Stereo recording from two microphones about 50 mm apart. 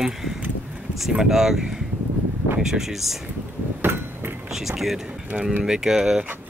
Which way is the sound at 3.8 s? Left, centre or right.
Right.